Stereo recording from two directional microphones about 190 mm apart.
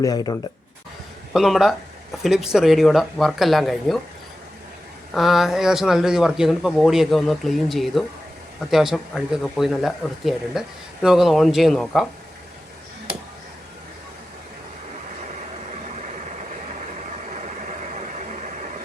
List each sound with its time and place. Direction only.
0.0 s speech: 20° left (ahead or behind)
1.3 s speech: centre (ahead or behind)
5.1 s speech: centre (ahead or behind)
17.9 s vehicle: 40° right (ahead or behind)